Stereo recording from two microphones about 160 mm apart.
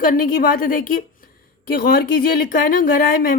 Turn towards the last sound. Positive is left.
turn(degrees=60)  # may be behind; listen again after turning